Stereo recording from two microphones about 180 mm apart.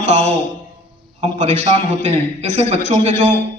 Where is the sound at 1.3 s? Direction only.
40° right (ahead or behind).